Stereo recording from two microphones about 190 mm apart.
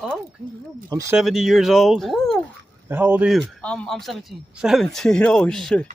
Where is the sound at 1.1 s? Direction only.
Centre (ahead or behind).